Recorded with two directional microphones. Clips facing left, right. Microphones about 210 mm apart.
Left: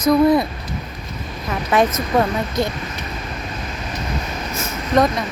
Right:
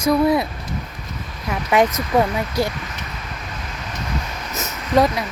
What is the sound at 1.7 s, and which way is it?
Speech, 15° right (ahead or behind).